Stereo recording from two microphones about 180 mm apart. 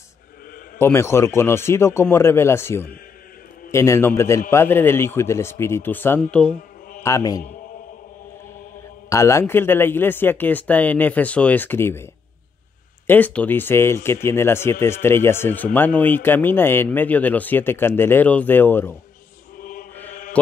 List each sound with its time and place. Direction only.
0.7 s speech: 15° left (ahead or behind)
9.1 s speech: 15° left (ahead or behind)
19.6 s mantra: 50° left (ahead or behind)